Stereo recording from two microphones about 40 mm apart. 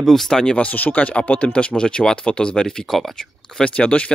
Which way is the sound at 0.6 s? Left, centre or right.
Left.